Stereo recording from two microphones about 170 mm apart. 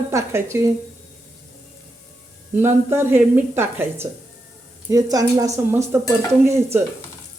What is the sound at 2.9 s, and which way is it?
A woman's voice, 15° right (ahead or behind).